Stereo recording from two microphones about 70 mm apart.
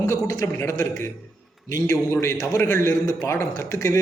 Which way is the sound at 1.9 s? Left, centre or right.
Left.